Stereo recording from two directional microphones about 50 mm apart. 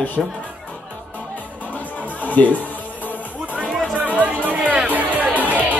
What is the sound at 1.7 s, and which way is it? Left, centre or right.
Music, left.